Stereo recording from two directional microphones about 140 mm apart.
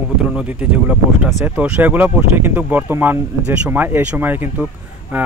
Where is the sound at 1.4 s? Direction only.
10° right (ahead or behind).